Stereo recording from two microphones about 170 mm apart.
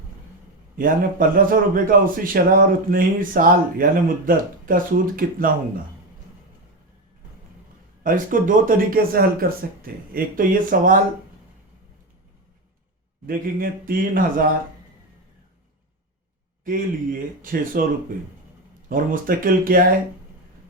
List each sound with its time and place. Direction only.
0.8 s a man's voice: 55° right (ahead or behind)
8.0 s a man's voice: 55° right (ahead or behind)
13.2 s a man's voice: 55° right (ahead or behind)
16.6 s a man's voice: 55° right (ahead or behind)
18.9 s a man's voice: 55° right (ahead or behind)